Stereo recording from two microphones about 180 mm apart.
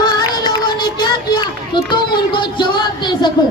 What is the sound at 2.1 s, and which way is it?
Music, 25° left (ahead or behind).